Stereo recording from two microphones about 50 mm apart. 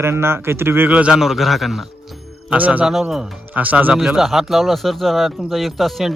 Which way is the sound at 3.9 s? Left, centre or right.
Centre.